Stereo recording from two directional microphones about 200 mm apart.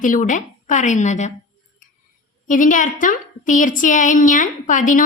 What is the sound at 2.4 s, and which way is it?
A woman's voice, 40° left (ahead or behind).